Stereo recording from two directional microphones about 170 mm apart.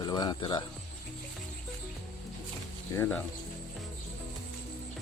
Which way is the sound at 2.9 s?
10° left (ahead or behind).